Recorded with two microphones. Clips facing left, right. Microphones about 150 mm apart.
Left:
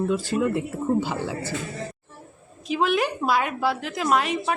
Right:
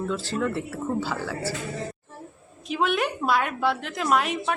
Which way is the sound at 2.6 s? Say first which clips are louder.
Left 2 dB; centre (ahead or behind).